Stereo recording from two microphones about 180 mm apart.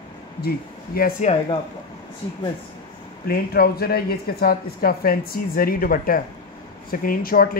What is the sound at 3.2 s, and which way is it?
Speech, 55° left (ahead or behind).